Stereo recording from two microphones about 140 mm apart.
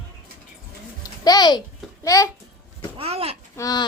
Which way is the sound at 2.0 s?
25° left (ahead or behind).